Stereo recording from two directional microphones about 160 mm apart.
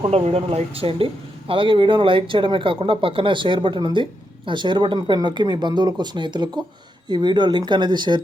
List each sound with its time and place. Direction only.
0.0 s speech: 40° right (ahead or behind)